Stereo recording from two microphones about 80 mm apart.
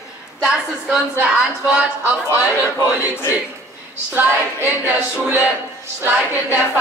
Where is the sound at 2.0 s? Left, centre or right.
Left.